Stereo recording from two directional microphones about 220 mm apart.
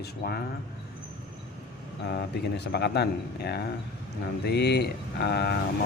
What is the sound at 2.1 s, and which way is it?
Speech, 50° left (ahead or behind).